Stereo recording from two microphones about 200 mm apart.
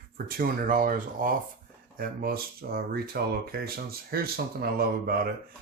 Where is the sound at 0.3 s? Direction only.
45° right (ahead or behind).